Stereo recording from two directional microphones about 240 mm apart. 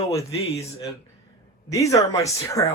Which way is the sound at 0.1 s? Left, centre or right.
Centre.